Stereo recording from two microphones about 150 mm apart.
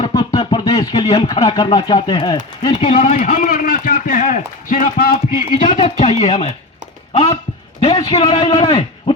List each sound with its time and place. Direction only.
0.0 s a sound: 25° left (ahead or behind)
0.3 s speech: 25° left (ahead or behind)
2.8 s a man's voice: 60° left (ahead or behind)
6.0 s a man's voice: 50° left (ahead or behind); by 9.1 s 35° left (ahead or behind)